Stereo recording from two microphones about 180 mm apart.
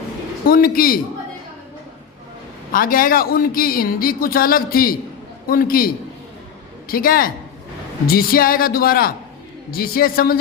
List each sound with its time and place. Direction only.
0.4 s speech: 55° left (ahead or behind)
2.7 s speech: 50° left (ahead or behind)